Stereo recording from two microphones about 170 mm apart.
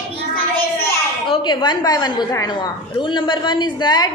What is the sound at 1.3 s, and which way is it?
A woman's voice, 25° left (ahead or behind).